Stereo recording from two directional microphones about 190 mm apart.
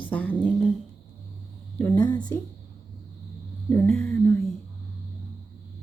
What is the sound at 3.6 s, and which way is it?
Speech, 5° left (ahead or behind).